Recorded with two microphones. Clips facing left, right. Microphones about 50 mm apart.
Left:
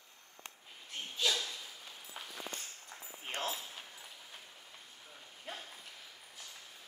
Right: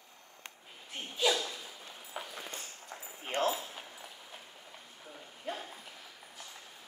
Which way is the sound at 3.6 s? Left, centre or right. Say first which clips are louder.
Right 3 dB; centre.